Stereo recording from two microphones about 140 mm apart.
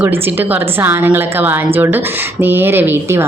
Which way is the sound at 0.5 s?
15° right (ahead or behind).